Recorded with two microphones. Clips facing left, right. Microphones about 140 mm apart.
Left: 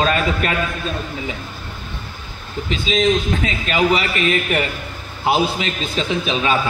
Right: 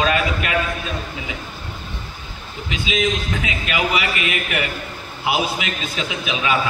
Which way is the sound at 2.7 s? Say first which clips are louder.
Left 4 dB; 35° left (ahead or behind).